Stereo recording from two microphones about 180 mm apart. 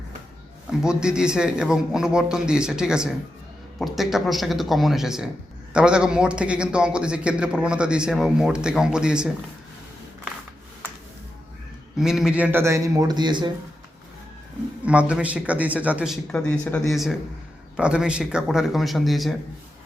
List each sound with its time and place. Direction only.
0.7 s a man's voice: 5° right (ahead or behind)
11.9 s speech: 5° right (ahead or behind); by 13.5 s 25° right (ahead or behind)
14.8 s speech: 5° right (ahead or behind)
16.3 s a man's voice: 5° left (ahead or behind)